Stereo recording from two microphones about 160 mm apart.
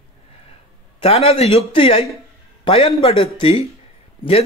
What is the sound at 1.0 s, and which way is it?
A man's voice, 40° left (ahead or behind).